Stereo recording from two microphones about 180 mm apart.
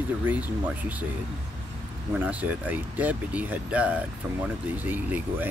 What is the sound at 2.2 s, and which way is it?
Speech, 10° right (ahead or behind).